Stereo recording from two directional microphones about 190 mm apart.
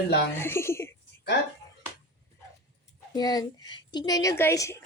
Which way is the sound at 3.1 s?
20° left (ahead or behind).